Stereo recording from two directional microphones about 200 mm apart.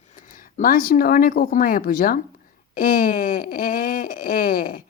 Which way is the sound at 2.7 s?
45° left (ahead or behind).